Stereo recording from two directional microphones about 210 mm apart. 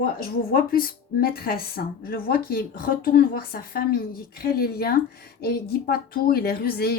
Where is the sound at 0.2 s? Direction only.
45° left (ahead or behind).